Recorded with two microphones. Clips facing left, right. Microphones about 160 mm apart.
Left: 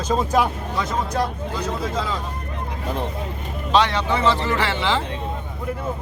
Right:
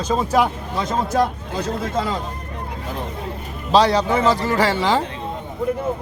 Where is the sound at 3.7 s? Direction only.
35° right (ahead or behind).